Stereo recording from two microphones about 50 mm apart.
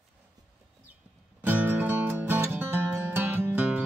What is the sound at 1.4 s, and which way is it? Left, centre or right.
Music, right.